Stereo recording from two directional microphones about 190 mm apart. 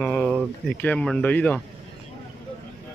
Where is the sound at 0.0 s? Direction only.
5° left (ahead or behind).